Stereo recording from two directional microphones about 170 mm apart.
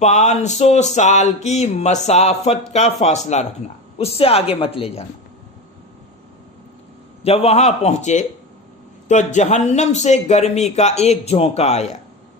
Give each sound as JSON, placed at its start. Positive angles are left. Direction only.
{"t": 0.0, "sound": "speech", "side_deg": 45}
{"t": 7.2, "sound": "speech", "side_deg": 35}